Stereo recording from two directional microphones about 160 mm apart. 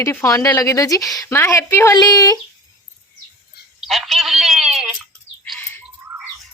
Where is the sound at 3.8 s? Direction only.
Centre (ahead or behind).